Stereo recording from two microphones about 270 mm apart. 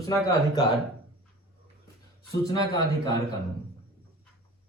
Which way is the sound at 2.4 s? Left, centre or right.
Centre.